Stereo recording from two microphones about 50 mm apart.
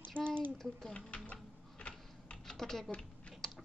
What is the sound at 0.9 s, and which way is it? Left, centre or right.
Typing, left.